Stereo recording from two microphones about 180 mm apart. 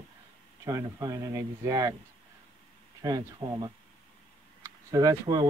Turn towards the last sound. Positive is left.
turn(degrees=-20)  # may be behind; listen again after turning